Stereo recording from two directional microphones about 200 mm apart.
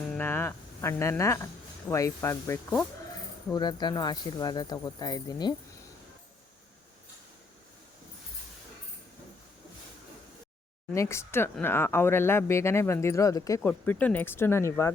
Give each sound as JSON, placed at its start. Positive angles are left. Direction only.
{"t": 0.2, "sound": "speech", "side_deg": 10}
{"t": 10.9, "sound": "speech", "side_deg": 15}